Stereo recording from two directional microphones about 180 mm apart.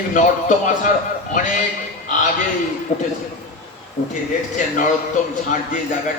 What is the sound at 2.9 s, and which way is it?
Speech, 50° left (ahead or behind).